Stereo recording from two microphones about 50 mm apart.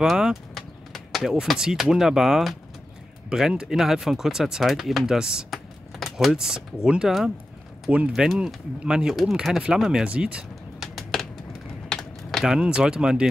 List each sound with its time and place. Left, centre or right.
0.0 s speech: centre
0.6 s a sound: centre
1.4 s speech: centre
5.5 s keys jangling: centre
6.3 s speech: centre
7.9 s speech: right
9.1 s speech: centre; by 10.4 s right
10.8 s a sound: centre
11.9 s typing: centre
12.4 s speech: centre